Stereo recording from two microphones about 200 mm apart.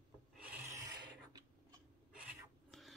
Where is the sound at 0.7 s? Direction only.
20° right (ahead or behind).